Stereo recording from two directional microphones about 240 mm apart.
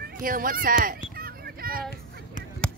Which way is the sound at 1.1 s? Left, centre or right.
Right.